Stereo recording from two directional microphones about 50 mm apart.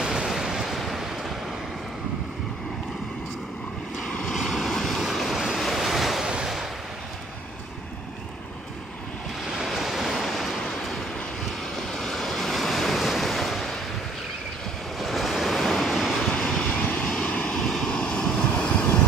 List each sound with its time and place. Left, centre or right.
0.0 s waves: centre
4.1 s vehicle: left
4.4 s vehicle: centre
5.1 s waves: centre
6.4 s a sound: centre
9.6 s waves: centre
15.0 s waves: centre
16.3 s vehicle: centre
16.8 s vehicle: left
17.6 s vehicle: centre; by 18.9 s left